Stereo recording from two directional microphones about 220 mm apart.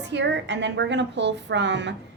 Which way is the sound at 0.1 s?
50° right (ahead or behind).